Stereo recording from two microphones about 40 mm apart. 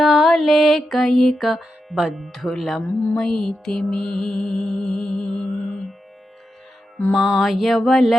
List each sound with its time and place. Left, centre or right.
0.0 s mantra: centre
0.9 s speech: centre
2.8 s speech: left
3.2 s music: centre
7.1 s speech: centre